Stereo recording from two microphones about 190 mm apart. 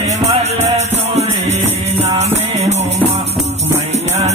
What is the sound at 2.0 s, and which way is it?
Music, 35° right (ahead or behind).